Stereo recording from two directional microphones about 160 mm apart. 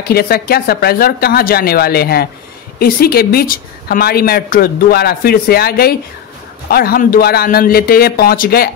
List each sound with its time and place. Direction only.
0.0 s a woman's voice: 75° left (ahead or behind)